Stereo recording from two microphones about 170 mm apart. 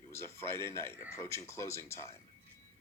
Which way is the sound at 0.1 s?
15° left (ahead or behind).